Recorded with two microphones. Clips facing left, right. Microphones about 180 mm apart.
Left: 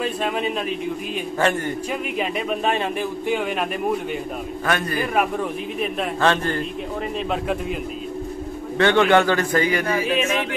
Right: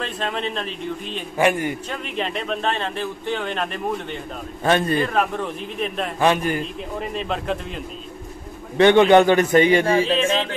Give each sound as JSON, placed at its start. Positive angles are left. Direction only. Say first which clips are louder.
{"t": 0.0, "sound": "speech", "louder": "left 3 dB", "side_deg": 10}
{"t": 1.4, "sound": "a man's voice", "louder": "right 3 dB", "side_deg": -10}
{"t": 1.9, "sound": "speech", "louder": "left 2 dB", "side_deg": 10}
{"t": 4.6, "sound": "a man's voice", "louder": "right 5 dB", "side_deg": -25}
{"t": 5.0, "sound": "speech", "louder": "even", "side_deg": 10}
{"t": 6.2, "sound": "a man's voice", "louder": "right 2 dB", "side_deg": -10}
{"t": 7.2, "sound": "a man's voice", "louder": "left 1 dB", "side_deg": 5}
{"t": 8.7, "sound": "a man's voice", "louder": "right 4 dB", "side_deg": -20}